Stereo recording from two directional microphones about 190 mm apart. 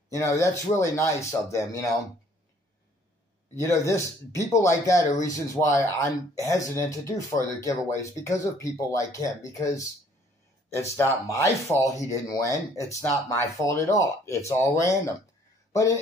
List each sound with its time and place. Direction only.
0.1 s speech: 15° left (ahead or behind)
3.5 s speech: 15° left (ahead or behind)
10.7 s speech: 15° left (ahead or behind)